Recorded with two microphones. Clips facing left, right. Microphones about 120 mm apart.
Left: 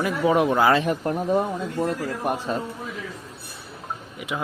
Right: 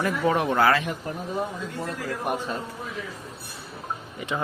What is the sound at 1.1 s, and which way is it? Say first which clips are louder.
Speech: left 8 dB; 60° left (ahead or behind).